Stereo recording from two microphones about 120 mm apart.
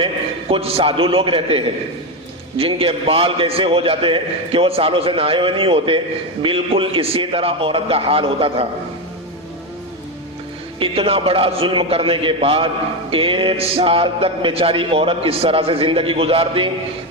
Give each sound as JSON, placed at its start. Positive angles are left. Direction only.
{"t": 0.5, "sound": "music", "side_deg": -50}
{"t": 10.8, "sound": "music", "side_deg": -50}